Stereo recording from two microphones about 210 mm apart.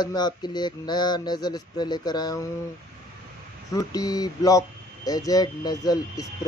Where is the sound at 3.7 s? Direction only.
15° left (ahead or behind).